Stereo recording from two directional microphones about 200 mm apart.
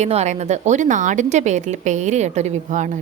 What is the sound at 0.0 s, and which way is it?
A woman's voice, 35° right (ahead or behind).